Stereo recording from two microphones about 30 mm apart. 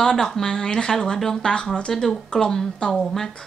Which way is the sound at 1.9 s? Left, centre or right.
Centre.